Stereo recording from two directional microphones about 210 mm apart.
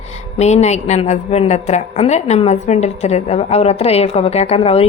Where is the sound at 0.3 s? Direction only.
30° left (ahead or behind).